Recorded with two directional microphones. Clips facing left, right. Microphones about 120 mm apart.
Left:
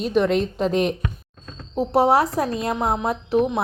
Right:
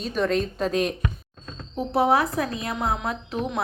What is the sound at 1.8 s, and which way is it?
A woman's voice, 35° left (ahead or behind).